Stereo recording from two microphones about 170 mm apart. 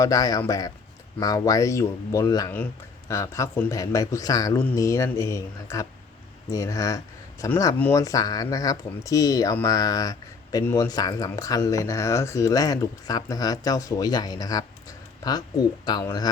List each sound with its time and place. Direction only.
0.0 s speech: 20° left (ahead or behind)